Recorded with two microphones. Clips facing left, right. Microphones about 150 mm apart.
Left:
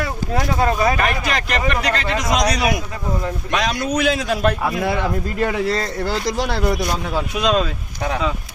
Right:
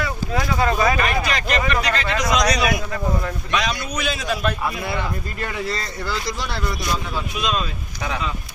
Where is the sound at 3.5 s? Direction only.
55° left (ahead or behind); by 7.7 s 75° left (ahead or behind).